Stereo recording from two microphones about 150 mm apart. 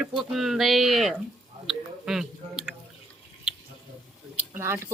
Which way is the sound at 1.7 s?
5° right (ahead or behind).